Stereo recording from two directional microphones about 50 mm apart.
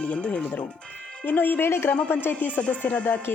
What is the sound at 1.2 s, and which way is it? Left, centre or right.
Speech, left.